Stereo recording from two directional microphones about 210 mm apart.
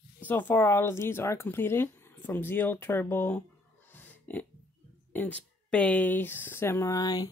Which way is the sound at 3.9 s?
10° left (ahead or behind).